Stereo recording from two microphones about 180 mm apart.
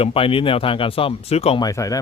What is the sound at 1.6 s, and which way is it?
Speech, 20° left (ahead or behind).